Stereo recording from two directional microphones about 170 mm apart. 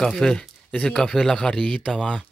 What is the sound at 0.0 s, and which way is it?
Speech, 5° left (ahead or behind).